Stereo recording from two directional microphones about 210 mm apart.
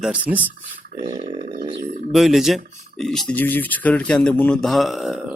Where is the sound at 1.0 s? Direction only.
25° right (ahead or behind).